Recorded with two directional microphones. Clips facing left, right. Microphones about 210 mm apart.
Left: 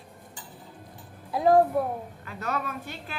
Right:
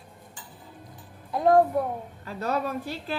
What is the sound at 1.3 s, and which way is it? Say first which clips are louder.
Speech: even; centre (ahead or behind).